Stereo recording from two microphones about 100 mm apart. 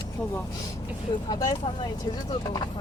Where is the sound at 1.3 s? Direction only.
40° left (ahead or behind).